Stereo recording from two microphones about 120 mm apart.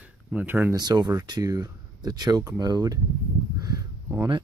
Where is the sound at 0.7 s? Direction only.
35° right (ahead or behind).